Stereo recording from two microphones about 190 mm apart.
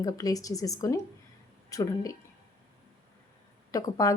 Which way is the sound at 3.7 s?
20° left (ahead or behind).